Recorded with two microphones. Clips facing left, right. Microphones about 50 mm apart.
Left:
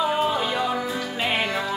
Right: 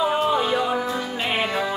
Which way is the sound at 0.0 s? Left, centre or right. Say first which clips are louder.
Right 2 dB; centre.